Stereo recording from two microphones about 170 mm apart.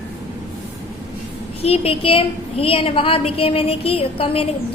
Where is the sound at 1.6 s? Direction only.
35° left (ahead or behind).